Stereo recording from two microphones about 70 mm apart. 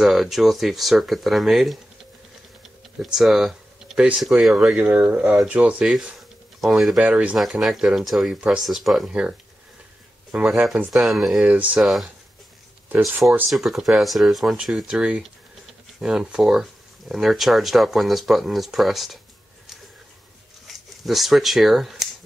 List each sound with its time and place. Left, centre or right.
0.0 s speech: centre
3.0 s speech: centre
4.7 s speech: right
5.9 s a sound: centre
7.0 s speech: centre
7.6 s speech: centre
10.5 s speech: centre
11.4 s speech: centre
11.8 s speech: centre
13.2 s speech: centre
15.0 s speech: centre
20.6 s speech: centre